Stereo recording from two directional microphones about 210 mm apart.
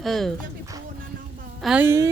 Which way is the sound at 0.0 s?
Centre (ahead or behind).